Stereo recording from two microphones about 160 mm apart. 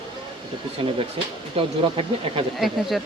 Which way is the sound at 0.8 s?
35° right (ahead or behind).